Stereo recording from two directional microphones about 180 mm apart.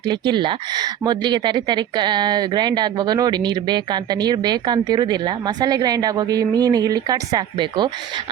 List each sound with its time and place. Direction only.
0.0 s speech: 25° right (ahead or behind)